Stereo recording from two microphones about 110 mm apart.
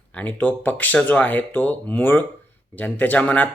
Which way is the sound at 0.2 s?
15° left (ahead or behind).